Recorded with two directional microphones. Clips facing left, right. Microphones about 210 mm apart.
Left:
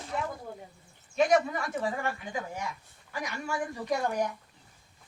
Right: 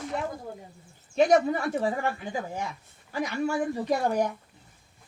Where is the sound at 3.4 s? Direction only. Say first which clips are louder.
Right 5 dB; 35° right (ahead or behind).